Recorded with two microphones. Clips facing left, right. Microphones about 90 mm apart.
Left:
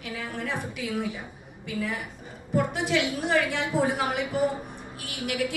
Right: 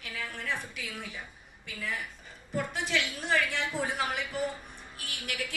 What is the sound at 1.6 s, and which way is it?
A woman's voice, 20° left (ahead or behind).